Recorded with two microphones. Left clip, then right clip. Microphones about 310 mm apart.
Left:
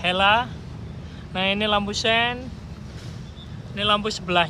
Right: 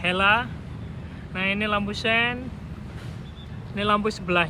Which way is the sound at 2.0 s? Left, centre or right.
Left.